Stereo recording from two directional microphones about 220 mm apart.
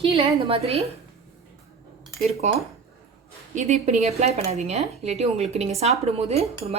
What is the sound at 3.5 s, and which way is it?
Speech, 30° right (ahead or behind).